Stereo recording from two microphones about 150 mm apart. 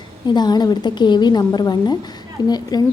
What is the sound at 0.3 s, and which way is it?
A woman's voice, 30° left (ahead or behind).